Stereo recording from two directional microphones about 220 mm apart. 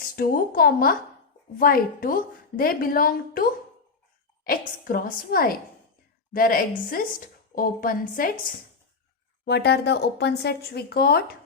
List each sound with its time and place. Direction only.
0.0 s a woman's voice: 40° left (ahead or behind)
9.5 s speech: 50° left (ahead or behind)